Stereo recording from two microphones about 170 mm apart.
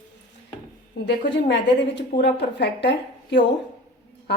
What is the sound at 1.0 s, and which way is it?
A woman's voice, 90° left.